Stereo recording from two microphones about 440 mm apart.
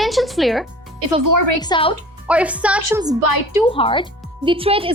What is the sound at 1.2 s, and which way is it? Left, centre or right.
Speech, right.